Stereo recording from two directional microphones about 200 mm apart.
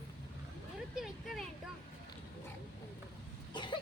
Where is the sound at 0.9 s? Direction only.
Centre (ahead or behind).